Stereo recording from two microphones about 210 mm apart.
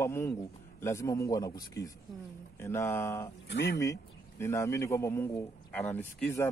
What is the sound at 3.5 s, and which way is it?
Speech, 55° left (ahead or behind).